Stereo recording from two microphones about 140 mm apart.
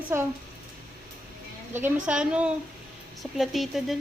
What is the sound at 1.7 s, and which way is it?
A child's voice, 10° right (ahead or behind).